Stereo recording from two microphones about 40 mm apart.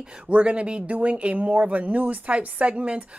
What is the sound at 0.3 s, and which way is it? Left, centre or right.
A woman's voice, right.